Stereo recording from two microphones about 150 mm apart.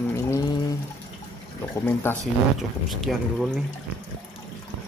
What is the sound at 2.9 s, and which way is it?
Speech, centre (ahead or behind).